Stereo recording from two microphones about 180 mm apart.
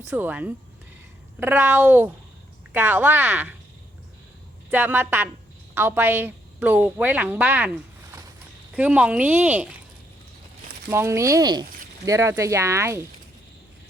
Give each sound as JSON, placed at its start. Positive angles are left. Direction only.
{"t": 0.1, "sound": "a woman's voice", "side_deg": -10}
{"t": 4.7, "sound": "a woman's voice", "side_deg": -10}
{"t": 8.7, "sound": "a woman's voice", "side_deg": -5}
{"t": 10.8, "sound": "a woman's voice", "side_deg": -15}